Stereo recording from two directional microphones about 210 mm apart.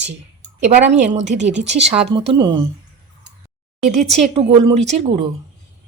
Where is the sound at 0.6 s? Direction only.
35° right (ahead or behind).